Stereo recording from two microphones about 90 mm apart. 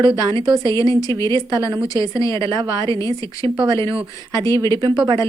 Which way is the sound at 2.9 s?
35° left (ahead or behind).